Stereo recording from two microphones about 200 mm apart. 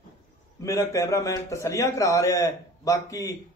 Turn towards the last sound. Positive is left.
turn(degrees=15)  # may be behind; listen again after turning